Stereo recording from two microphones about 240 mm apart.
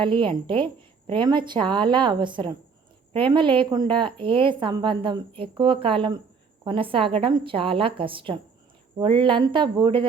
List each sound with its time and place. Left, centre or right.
0.0 s a woman's voice: centre